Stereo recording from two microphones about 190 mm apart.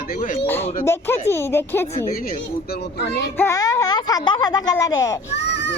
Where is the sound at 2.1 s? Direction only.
50° left (ahead or behind).